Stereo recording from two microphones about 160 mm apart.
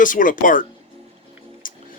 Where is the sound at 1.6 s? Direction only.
60° left (ahead or behind).